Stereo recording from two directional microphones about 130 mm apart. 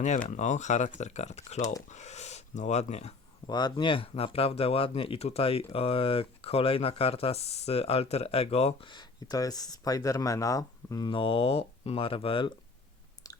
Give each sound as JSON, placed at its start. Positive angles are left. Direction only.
{"t": 0.0, "sound": "speech", "side_deg": 65}
{"t": 3.4, "sound": "speech", "side_deg": 35}
{"t": 8.9, "sound": "speech", "side_deg": 35}
{"t": 11.1, "sound": "speech", "side_deg": 45}
{"t": 13.2, "sound": "chewing", "side_deg": 25}